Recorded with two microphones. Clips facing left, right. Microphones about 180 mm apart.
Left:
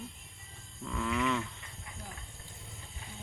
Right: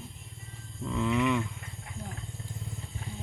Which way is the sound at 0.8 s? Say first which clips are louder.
Right 5 dB; 20° right (ahead or behind).